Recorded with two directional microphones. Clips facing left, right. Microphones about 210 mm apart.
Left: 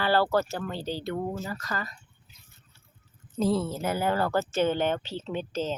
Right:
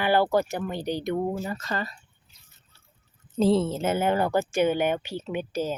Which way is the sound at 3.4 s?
25° right (ahead or behind).